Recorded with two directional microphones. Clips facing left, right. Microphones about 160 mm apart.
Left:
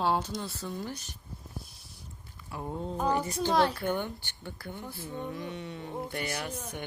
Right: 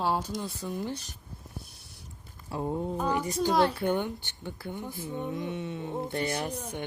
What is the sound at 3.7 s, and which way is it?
Speech, 20° right (ahead or behind).